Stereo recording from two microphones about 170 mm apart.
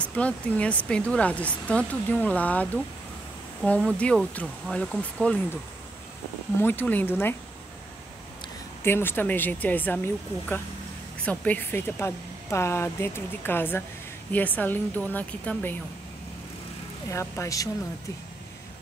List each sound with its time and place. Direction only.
0.0 s speech: 5° left (ahead or behind)
6.6 s speech: 10° left (ahead or behind)
8.8 s speech: 15° left (ahead or behind)
17.1 s speech: 15° left (ahead or behind)